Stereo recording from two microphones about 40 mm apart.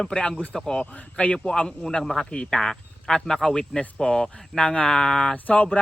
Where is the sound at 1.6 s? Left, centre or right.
Centre.